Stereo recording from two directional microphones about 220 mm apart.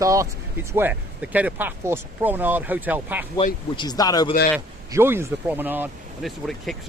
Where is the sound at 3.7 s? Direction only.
20° left (ahead or behind).